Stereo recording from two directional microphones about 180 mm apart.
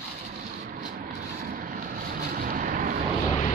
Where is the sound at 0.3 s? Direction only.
50° right (ahead or behind).